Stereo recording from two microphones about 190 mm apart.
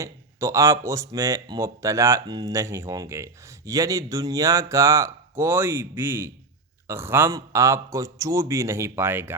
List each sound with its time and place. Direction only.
0.0 s speech: 15° right (ahead or behind)